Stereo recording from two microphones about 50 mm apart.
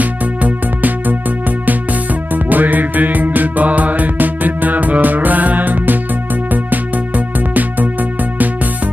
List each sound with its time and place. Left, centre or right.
0.0 s music: right
2.3 s music: right